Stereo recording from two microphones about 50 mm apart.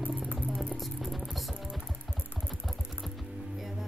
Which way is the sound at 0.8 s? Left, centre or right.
Centre.